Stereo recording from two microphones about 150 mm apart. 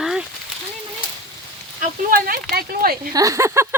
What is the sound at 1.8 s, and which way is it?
Speech, 75° right (ahead or behind).